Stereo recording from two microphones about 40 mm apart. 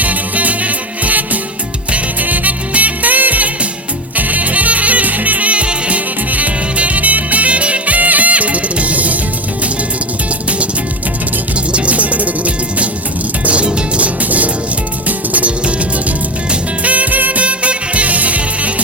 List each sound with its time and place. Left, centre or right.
0.0 s music: right
11.7 s music: right
13.4 s music: right